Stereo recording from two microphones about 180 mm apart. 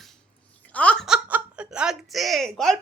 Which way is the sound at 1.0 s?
5° right (ahead or behind).